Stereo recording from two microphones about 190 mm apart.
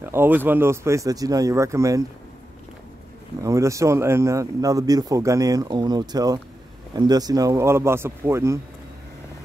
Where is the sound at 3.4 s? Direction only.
15° right (ahead or behind).